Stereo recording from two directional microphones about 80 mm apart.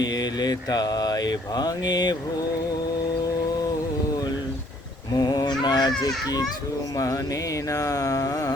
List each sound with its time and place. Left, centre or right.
0.1 s mantra: left
5.1 s honk: left
6.9 s carnatic music: left